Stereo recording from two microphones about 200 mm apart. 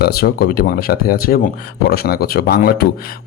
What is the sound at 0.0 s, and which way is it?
Speech, 50° left (ahead or behind).